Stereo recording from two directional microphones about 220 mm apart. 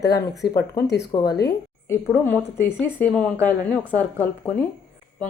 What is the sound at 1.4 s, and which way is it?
A woman's voice, 10° left (ahead or behind).